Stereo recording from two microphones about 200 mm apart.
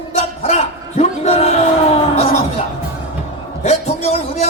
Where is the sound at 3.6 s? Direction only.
30° left (ahead or behind).